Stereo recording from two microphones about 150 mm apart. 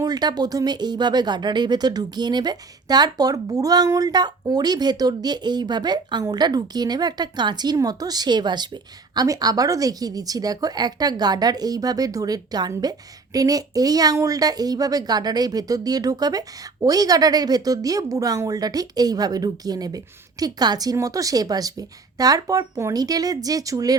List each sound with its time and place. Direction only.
0.0 s speech: 25° right (ahead or behind)